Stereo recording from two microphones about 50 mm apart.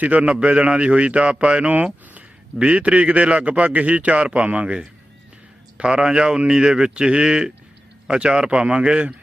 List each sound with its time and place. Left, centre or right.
0.0 s a man's voice: right